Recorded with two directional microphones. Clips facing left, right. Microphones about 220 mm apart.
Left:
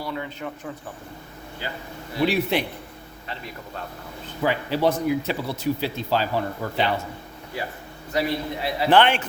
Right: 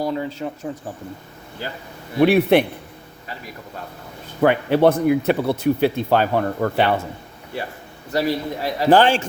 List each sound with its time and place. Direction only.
0.0 s a man's voice: 35° right (ahead or behind)
2.1 s speech: 60° right (ahead or behind)
4.4 s speech: 60° right (ahead or behind)
8.1 s a man's voice: 40° right (ahead or behind)